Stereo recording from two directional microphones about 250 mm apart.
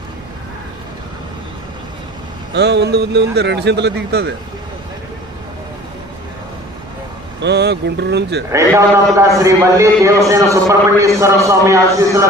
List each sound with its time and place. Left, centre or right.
2.5 s speech: right
7.4 s speech: right
8.5 s a man's voice: centre